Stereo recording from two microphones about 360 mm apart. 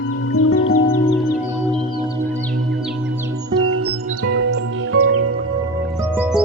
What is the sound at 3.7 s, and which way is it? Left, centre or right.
Music, right.